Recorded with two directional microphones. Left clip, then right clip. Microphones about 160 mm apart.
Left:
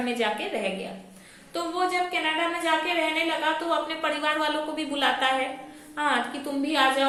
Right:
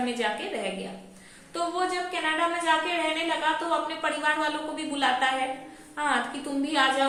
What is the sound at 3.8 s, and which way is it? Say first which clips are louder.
A woman's voice: even; 20° left (ahead or behind).